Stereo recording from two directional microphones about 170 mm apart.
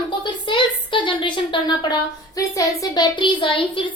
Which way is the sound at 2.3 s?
20° left (ahead or behind).